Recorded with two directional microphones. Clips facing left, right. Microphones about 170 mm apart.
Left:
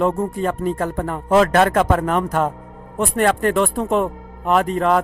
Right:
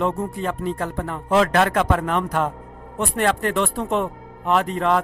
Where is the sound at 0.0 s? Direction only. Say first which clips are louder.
Left 4 dB; 45° left (ahead or behind).